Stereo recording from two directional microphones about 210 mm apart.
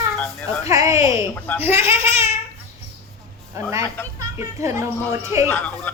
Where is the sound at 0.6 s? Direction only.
15° right (ahead or behind).